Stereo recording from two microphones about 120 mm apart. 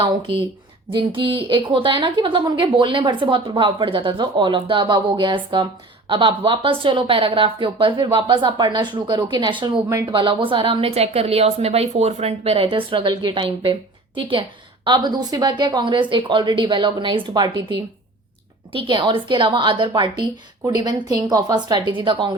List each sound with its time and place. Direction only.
0.9 s a woman's voice: 45° right (ahead or behind)
18.7 s a woman's voice: 45° right (ahead or behind)